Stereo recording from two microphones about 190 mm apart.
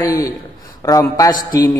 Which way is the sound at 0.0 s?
20° left (ahead or behind).